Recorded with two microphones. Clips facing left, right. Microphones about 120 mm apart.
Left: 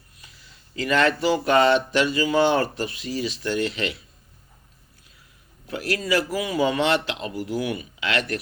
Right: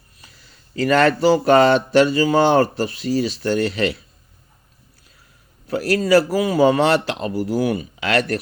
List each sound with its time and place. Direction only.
0.2 s speech: 40° right (ahead or behind)
5.6 s speech: 40° right (ahead or behind)